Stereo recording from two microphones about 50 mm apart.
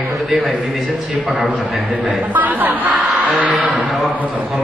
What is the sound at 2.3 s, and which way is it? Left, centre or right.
Speech, right.